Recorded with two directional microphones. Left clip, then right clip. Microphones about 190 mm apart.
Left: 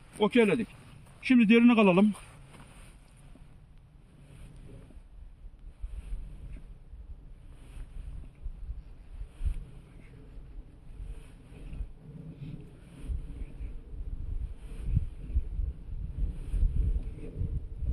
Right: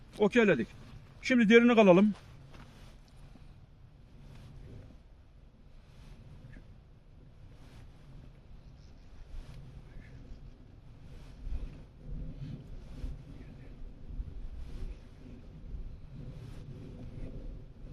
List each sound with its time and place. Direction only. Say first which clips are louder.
0.2 s a man's voice: left 1 dB; 25° right (ahead or behind)